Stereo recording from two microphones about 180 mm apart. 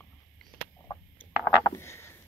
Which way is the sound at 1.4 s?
15° left (ahead or behind).